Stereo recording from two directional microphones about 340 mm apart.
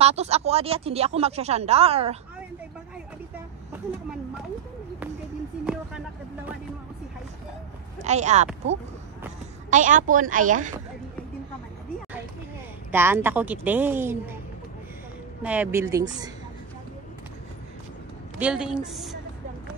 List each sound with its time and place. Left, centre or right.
0.0 s speech: centre
8.0 s a woman's voice: centre
9.7 s a woman's voice: right
12.9 s a woman's voice: centre
15.4 s speech: centre
18.4 s a woman's voice: centre